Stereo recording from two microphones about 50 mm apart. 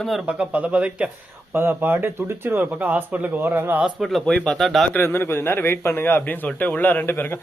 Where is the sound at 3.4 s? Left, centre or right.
Right.